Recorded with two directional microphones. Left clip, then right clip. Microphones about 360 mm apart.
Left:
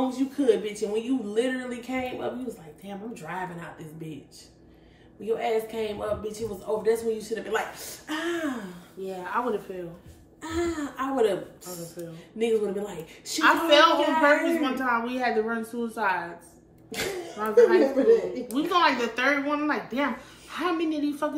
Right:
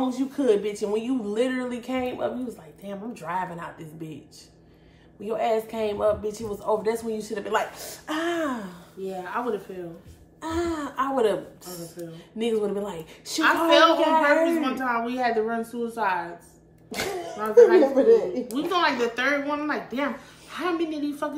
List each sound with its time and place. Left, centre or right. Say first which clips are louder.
0.1 s speech: right 1 dB; centre
5.2 s speech: right 2 dB; centre
9.0 s speech: even; centre
10.4 s speech: right 2 dB; centre
13.4 s speech: right 1 dB; centre
17.4 s speech: right 3 dB; centre